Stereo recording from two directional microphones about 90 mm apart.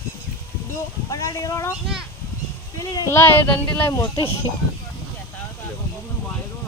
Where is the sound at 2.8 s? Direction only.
50° left (ahead or behind).